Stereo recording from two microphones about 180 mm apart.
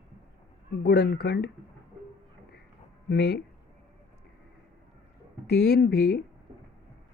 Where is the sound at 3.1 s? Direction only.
65° left (ahead or behind).